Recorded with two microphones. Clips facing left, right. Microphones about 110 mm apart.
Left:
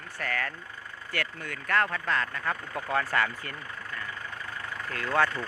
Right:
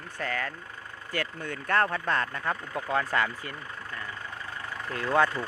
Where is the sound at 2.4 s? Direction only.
15° right (ahead or behind).